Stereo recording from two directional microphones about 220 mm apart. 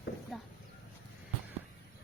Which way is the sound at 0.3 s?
Centre (ahead or behind).